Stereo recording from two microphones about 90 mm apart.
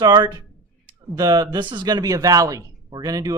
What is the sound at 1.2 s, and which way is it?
Speech, 45° right (ahead or behind).